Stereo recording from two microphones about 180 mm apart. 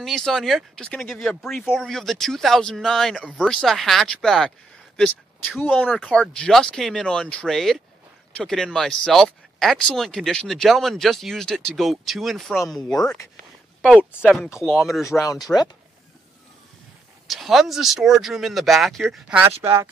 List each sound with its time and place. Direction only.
0.0 s speech: centre (ahead or behind)
5.9 s speech: centre (ahead or behind)
15.0 s speech: 20° left (ahead or behind)
17.3 s speech: centre (ahead or behind)
19.6 s speech: 15° right (ahead or behind)